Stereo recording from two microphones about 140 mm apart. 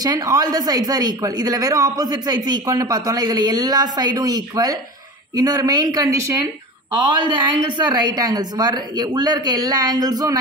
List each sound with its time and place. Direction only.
0.0 s speech: 25° right (ahead or behind)